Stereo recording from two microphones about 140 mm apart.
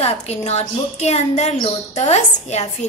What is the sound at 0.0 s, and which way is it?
A woman's voice, 50° left (ahead or behind).